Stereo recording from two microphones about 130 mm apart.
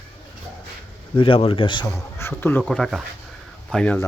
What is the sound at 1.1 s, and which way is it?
Speech, 45° left (ahead or behind).